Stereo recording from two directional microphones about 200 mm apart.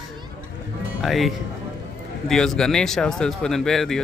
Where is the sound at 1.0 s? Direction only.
Centre (ahead or behind).